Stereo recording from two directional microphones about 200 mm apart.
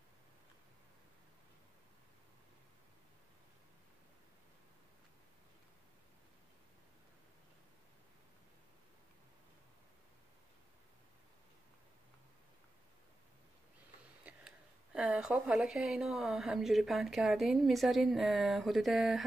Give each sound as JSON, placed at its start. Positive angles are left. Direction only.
{"t": 14.2, "sound": "speech", "side_deg": -5}